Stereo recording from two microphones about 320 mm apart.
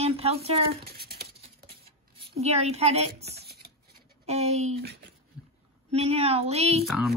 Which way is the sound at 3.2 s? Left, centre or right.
Right.